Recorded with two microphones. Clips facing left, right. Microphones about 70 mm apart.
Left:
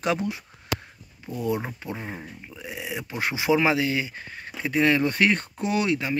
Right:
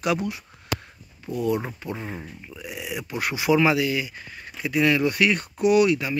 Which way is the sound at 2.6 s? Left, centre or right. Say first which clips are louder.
Even; left.